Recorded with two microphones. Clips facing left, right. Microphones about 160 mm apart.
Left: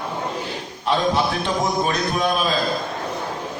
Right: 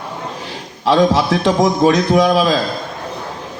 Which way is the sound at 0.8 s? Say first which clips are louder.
Right 7 dB; 90° right.